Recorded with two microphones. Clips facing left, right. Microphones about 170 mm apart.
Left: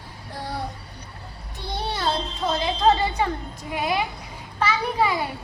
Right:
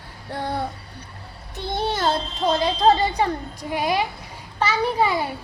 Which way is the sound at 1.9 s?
45° right (ahead or behind).